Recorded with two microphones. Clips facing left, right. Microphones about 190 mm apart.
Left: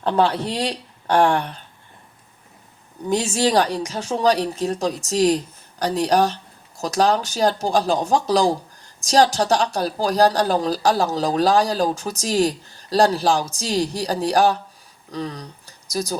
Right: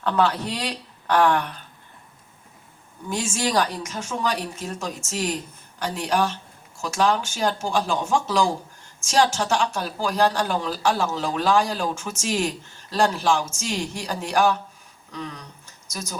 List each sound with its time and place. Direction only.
0.0 s speech: 30° left (ahead or behind)
3.1 s speech: 40° left (ahead or behind)